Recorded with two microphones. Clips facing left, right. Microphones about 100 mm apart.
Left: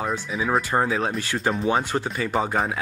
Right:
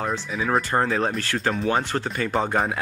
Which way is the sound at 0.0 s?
5° left (ahead or behind).